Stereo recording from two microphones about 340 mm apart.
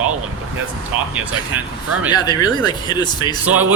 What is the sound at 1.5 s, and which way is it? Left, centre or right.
Speech, centre.